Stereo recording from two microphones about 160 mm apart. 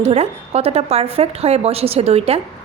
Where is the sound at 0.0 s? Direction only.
40° right (ahead or behind).